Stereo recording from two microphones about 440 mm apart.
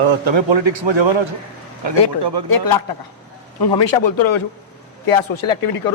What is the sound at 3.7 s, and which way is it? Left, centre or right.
Speech, left.